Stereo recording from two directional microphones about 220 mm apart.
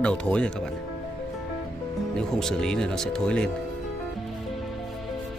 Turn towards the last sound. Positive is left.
turn(degrees=5)  # may be behind; listen again after turning